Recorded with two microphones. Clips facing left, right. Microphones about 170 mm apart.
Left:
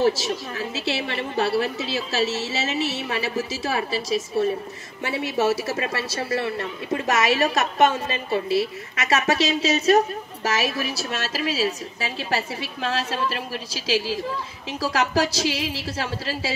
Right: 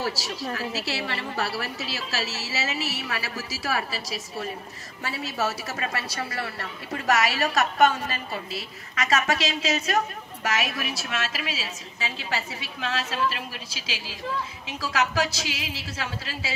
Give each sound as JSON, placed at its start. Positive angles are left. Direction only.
{"t": 0.0, "sound": "a woman's voice", "side_deg": 20}